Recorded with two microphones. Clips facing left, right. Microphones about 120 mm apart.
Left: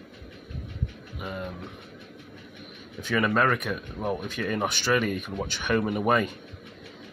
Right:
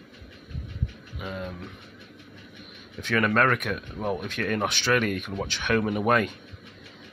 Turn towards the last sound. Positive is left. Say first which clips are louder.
# right 1 dB
turn(degrees=5)  # may be behind; listen again after turning